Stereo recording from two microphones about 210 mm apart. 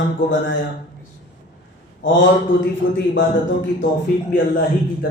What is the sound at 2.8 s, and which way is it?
Speech, 60° left (ahead or behind).